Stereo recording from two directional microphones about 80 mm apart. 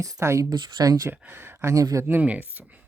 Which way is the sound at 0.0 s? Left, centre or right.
Right.